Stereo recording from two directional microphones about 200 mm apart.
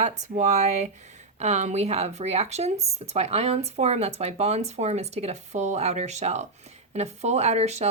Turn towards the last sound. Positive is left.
turn(degrees=-35)  # may be behind; listen again after turning